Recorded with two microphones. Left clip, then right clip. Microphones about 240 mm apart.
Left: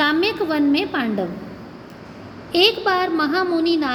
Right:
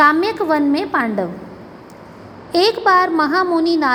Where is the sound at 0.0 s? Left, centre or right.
Centre.